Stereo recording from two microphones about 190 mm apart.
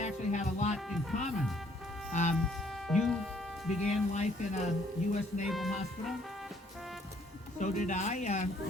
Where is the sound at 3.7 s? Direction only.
35° left (ahead or behind).